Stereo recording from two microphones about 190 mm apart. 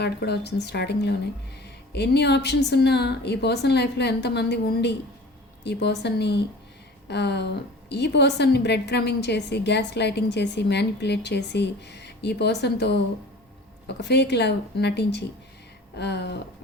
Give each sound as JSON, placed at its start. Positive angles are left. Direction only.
{"t": 0.0, "sound": "a woman's voice", "side_deg": 60}